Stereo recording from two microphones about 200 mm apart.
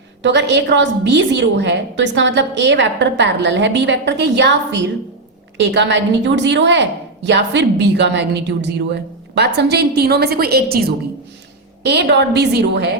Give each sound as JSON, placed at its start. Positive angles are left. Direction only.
{"t": 0.2, "sound": "a woman's voice", "side_deg": -60}